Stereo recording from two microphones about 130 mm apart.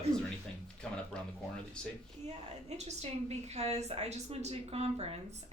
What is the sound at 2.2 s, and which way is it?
A woman's voice, 55° right (ahead or behind).